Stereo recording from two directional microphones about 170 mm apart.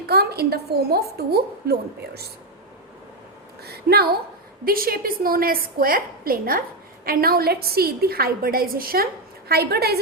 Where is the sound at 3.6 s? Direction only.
70° right (ahead or behind).